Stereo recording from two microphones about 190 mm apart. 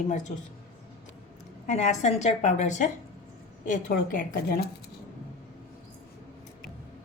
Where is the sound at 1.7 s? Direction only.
40° left (ahead or behind).